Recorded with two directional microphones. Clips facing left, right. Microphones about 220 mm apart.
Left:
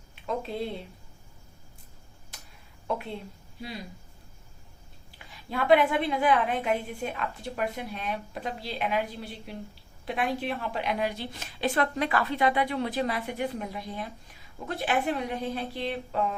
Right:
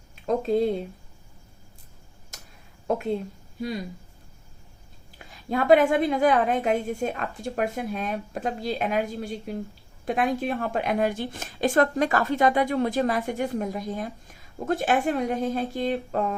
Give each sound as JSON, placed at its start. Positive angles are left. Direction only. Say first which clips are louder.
{"t": 0.3, "sound": "a woman's voice", "louder": "right 9 dB", "side_deg": -45}
{"t": 2.3, "sound": "a sound", "louder": "right 3 dB", "side_deg": -45}
{"t": 5.5, "sound": "a woman's voice", "louder": "right 4 dB", "side_deg": -45}